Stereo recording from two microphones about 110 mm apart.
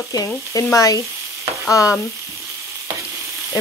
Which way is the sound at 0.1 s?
35° left (ahead or behind).